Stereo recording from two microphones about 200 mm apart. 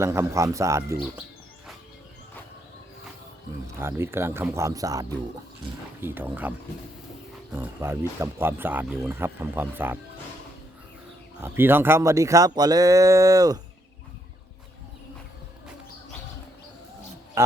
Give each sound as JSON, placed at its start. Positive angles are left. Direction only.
{"t": 0.0, "sound": "speech", "side_deg": -15}
{"t": 3.8, "sound": "speech", "side_deg": -10}
{"t": 7.5, "sound": "speech", "side_deg": -10}
{"t": 11.3, "sound": "speech", "side_deg": -10}
{"t": 17.4, "sound": "speech", "side_deg": -15}